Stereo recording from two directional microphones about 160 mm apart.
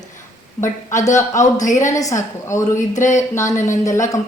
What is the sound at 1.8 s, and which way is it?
Speech, 20° left (ahead or behind).